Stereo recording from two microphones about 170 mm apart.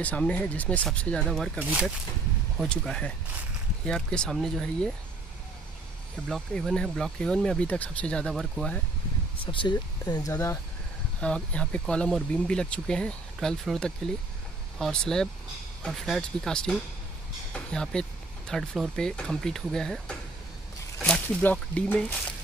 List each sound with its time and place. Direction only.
0.0 s speech: 10° left (ahead or behind)
1.6 s speech: 10° right (ahead or behind)
6.2 s speech: centre (ahead or behind)
9.5 s speech: 30° left (ahead or behind)
11.1 s speech: 5° left (ahead or behind)